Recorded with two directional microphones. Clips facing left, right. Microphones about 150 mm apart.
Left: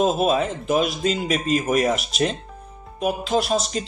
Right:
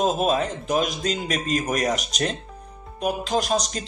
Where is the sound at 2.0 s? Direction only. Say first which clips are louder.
Left 3 dB; 40° right (ahead or behind).